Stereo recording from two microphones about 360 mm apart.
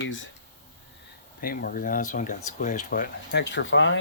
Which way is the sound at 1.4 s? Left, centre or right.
Left.